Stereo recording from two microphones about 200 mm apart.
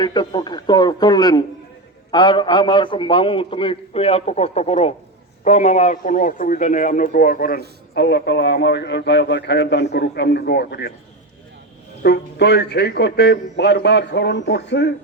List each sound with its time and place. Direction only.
0.0 s a man's voice: 20° left (ahead or behind); by 10.9 s 55° left (ahead or behind)
12.0 s a man's voice: 55° left (ahead or behind)